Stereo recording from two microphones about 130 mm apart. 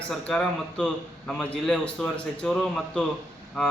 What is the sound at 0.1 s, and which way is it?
A man's voice, 5° left (ahead or behind).